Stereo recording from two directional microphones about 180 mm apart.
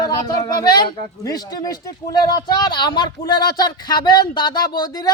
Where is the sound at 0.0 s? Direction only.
20° left (ahead or behind).